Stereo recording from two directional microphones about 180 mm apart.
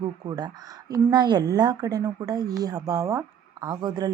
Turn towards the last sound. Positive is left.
turn(degrees=-20)  # may be behind; listen again after turning